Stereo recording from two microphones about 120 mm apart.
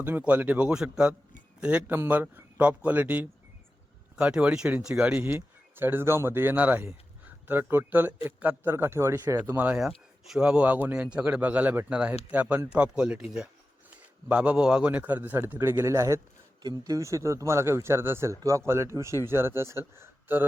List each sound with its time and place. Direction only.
0.0 s speech: 15° right (ahead or behind)
5.2 s speech: 20° right (ahead or behind)